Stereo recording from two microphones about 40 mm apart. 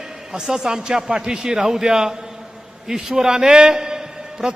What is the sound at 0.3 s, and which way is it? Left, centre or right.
A man's voice, centre.